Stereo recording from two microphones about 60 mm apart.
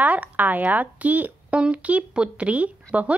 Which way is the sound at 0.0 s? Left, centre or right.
Right.